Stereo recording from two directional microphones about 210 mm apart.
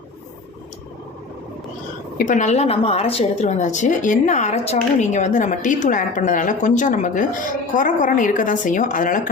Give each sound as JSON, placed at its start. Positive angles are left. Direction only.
{"t": 2.1, "sound": "a woman's voice", "side_deg": 35}